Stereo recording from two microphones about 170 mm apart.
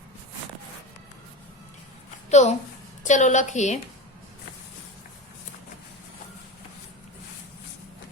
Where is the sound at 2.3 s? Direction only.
40° left (ahead or behind).